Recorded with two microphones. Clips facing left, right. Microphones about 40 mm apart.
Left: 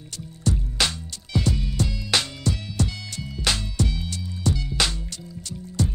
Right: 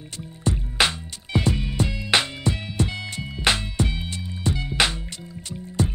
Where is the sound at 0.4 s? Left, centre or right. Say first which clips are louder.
Right 3 dB; right.